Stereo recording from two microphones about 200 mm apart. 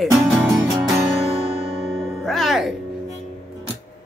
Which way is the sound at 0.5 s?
15° right (ahead or behind).